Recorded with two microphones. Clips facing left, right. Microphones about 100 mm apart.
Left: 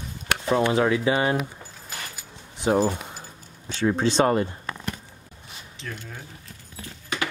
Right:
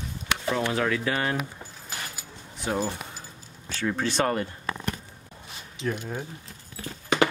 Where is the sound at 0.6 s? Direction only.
20° left (ahead or behind).